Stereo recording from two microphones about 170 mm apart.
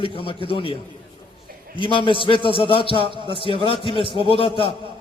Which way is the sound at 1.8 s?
30° left (ahead or behind).